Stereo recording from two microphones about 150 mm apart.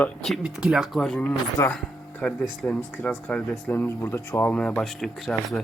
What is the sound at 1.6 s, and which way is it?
Speech, 20° left (ahead or behind).